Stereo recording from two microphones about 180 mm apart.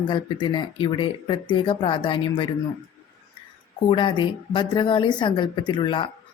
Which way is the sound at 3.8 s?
25° left (ahead or behind).